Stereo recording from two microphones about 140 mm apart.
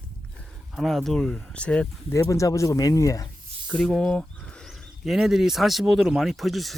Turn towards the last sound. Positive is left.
turn(degrees=0)  # may be behind; listen again after turning